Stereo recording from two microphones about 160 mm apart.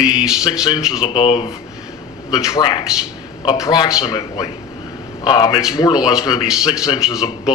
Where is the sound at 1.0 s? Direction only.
35° left (ahead or behind).